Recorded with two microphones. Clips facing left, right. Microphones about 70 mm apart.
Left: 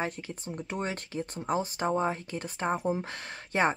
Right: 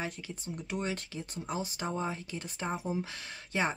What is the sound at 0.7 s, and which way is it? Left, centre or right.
Speech, left.